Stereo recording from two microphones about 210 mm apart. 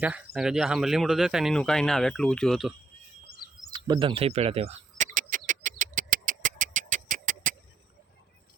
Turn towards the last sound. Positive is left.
turn(degrees=-40)  # may be behind; listen again after turning